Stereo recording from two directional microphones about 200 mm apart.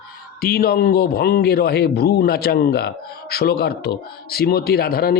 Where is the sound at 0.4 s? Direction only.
50° left (ahead or behind).